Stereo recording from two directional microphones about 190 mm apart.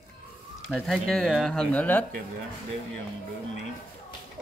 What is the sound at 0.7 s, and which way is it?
Speech, centre (ahead or behind).